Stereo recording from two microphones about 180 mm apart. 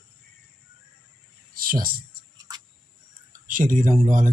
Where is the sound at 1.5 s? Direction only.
55° right (ahead or behind).